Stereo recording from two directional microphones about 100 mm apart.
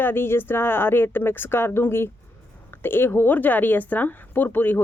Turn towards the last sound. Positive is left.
turn(degrees=20)  # may be behind; listen again after turning